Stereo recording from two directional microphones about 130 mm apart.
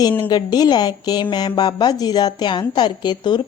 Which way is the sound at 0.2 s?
35° left (ahead or behind).